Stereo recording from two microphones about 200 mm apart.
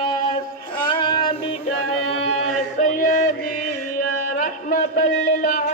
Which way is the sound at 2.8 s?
40° left (ahead or behind).